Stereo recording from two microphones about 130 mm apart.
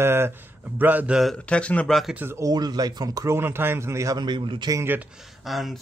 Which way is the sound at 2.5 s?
30° right (ahead or behind).